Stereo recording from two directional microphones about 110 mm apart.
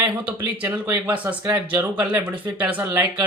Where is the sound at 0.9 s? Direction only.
15° right (ahead or behind).